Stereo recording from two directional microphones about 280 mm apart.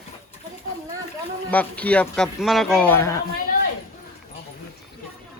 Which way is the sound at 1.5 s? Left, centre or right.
Centre.